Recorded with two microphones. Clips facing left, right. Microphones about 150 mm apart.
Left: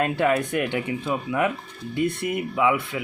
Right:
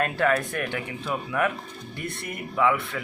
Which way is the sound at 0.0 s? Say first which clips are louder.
Left 2 dB; 20° left (ahead or behind).